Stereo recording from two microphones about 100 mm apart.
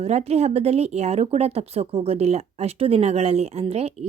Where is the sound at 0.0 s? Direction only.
90° right.